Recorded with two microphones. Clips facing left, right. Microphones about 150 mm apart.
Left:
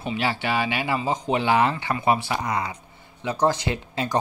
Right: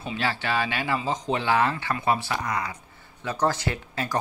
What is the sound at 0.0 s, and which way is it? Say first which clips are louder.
Speech: left 3 dB; 10° left (ahead or behind).